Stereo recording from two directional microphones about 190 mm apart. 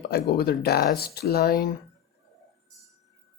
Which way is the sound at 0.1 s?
55° left (ahead or behind).